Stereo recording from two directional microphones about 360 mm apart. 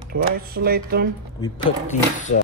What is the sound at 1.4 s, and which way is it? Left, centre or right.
Speech, centre.